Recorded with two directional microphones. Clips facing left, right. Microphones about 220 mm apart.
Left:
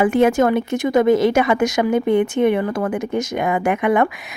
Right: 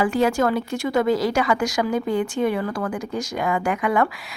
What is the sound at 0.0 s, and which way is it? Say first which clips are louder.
Speech: left 5 dB; 20° left (ahead or behind).